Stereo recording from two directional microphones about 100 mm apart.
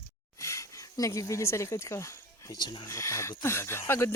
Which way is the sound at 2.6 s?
45° left (ahead or behind).